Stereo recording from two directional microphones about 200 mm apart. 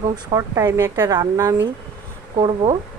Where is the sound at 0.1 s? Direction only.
15° right (ahead or behind).